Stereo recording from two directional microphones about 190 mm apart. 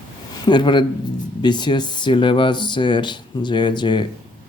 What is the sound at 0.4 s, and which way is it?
Speech, 25° left (ahead or behind).